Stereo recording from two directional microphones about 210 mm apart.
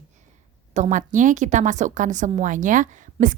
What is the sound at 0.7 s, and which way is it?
A woman's voice, 35° right (ahead or behind).